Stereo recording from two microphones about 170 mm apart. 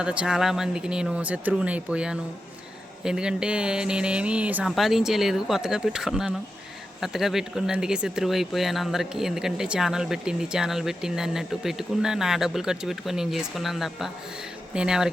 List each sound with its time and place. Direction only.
0.0 s speech: 5° right (ahead or behind)